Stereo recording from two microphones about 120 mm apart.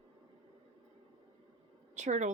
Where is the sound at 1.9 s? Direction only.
75° right (ahead or behind).